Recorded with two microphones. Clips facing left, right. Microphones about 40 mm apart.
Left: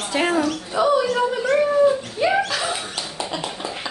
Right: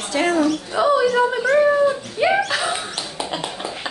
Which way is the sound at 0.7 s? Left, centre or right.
Centre.